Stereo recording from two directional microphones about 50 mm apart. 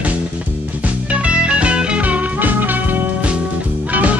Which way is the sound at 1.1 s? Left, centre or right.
Right.